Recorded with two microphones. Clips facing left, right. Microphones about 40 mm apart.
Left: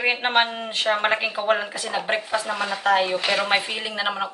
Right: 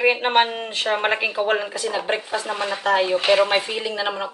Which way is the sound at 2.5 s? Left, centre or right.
Right.